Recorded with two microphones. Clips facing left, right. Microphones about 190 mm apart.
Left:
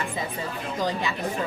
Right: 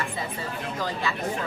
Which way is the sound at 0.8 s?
20° left (ahead or behind).